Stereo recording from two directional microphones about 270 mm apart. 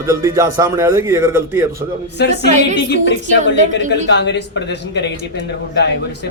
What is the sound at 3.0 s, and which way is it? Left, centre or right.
A man's voice, left.